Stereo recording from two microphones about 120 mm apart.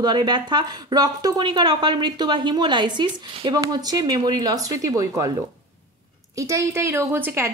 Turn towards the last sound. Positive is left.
turn(degrees=-20)  # may be behind; listen again after turning